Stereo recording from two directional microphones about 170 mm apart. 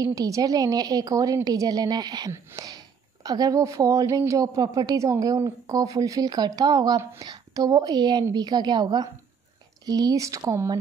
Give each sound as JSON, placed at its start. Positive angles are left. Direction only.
{"t": 0.0, "sound": "a woman's voice", "side_deg": -20}